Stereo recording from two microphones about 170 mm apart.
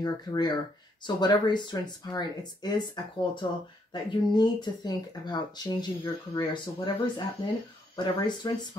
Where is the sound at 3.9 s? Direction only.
25° left (ahead or behind).